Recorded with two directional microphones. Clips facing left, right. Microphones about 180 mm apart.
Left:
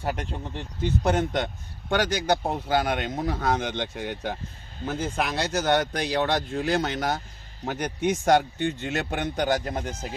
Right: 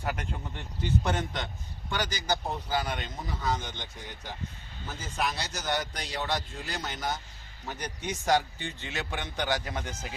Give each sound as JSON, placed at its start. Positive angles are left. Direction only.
{"t": 0.0, "sound": "speech", "side_deg": 35}
{"t": 1.0, "sound": "speech", "side_deg": 50}
{"t": 1.9, "sound": "speech", "side_deg": 60}